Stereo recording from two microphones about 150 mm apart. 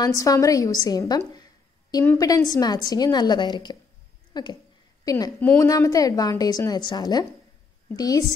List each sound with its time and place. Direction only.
0.0 s a woman's voice: 20° left (ahead or behind)